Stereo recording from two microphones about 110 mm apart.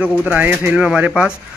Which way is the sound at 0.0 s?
15° right (ahead or behind).